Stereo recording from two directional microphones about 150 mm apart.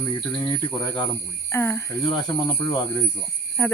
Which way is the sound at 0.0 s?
30° left (ahead or behind).